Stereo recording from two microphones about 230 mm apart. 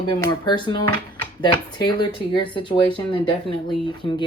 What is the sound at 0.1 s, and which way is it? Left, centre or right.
Speech, centre.